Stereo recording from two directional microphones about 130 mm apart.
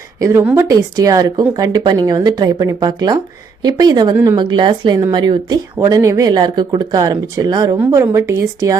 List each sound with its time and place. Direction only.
0.2 s a woman's voice: 25° right (ahead or behind)
0.7 s speech: 30° right (ahead or behind)
4.1 s speech: 20° right (ahead or behind)
4.4 s speech: 35° right (ahead or behind)